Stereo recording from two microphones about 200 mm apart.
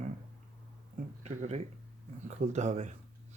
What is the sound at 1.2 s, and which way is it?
Speech, 35° right (ahead or behind).